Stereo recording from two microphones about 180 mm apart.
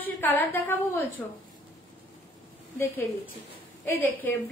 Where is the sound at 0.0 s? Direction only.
10° left (ahead or behind).